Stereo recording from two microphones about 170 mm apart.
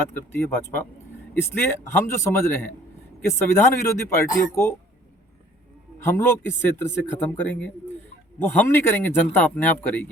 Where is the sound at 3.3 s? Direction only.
15° left (ahead or behind).